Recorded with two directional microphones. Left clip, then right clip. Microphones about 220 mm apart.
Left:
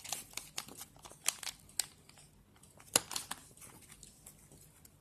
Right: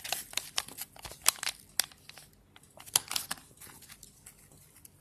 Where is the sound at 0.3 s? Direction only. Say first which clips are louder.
Right 10 dB; 20° right (ahead or behind).